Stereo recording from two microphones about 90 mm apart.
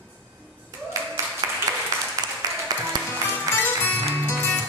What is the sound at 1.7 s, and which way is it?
Applause, 40° right (ahead or behind).